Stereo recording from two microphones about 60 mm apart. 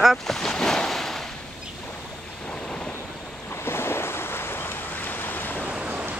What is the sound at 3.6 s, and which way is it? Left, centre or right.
Waves, left.